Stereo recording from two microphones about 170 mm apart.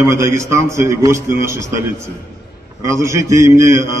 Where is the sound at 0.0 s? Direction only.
15° right (ahead or behind).